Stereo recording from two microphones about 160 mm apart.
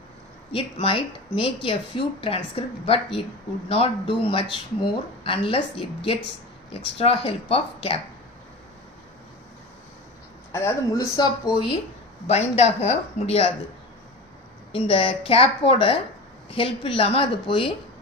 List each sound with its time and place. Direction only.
0.5 s a woman's voice: 35° left (ahead or behind)
10.5 s speech: 20° left (ahead or behind)
12.3 s speech: 45° left (ahead or behind)
14.7 s a woman's voice: 35° left (ahead or behind)